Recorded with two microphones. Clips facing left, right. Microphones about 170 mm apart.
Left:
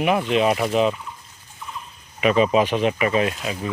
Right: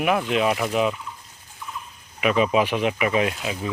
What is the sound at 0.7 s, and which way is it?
Speech, 30° left (ahead or behind).